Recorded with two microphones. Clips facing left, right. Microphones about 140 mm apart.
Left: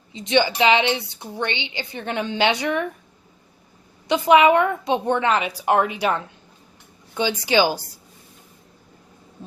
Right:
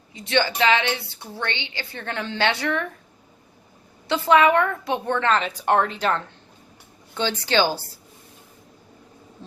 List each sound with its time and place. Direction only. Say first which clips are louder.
0.1 s a woman's voice: left 3 dB; 20° left (ahead or behind)
4.1 s a woman's voice: left 2 dB; 15° left (ahead or behind)